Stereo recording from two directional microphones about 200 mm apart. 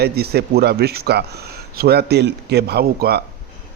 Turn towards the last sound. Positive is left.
turn(degrees=-55)  # may be behind; listen again after turning